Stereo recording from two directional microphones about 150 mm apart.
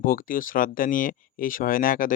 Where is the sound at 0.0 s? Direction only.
70° left (ahead or behind).